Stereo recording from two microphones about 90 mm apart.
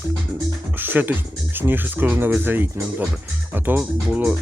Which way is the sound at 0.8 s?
20° right (ahead or behind).